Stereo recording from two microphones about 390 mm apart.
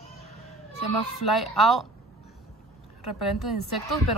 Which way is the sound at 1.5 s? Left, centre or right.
Centre.